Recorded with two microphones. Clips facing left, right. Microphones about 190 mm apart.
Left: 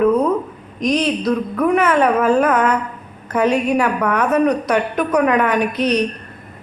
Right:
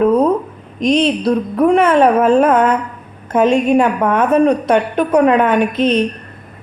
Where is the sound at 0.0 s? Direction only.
30° right (ahead or behind).